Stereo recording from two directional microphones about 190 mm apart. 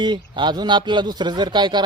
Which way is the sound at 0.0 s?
25° right (ahead or behind).